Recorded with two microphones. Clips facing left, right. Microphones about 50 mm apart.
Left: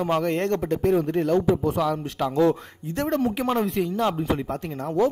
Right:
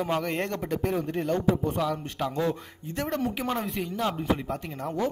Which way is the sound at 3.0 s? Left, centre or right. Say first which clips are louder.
Left 5 dB; left.